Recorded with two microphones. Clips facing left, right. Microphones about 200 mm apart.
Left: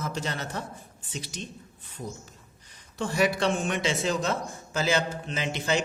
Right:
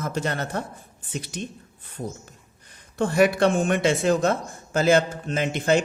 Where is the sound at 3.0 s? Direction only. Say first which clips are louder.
Right 6 dB; 55° right (ahead or behind).